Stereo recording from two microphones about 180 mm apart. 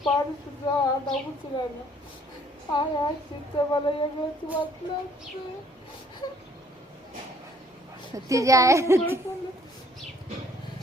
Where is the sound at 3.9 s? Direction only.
25° left (ahead or behind).